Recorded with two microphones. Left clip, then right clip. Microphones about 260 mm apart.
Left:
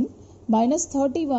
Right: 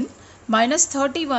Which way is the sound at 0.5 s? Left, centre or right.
Centre.